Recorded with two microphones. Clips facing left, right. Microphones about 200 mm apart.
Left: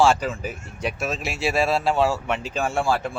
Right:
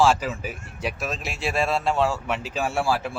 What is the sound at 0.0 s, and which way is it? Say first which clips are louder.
Speech: left 1 dB; 5° right (ahead or behind).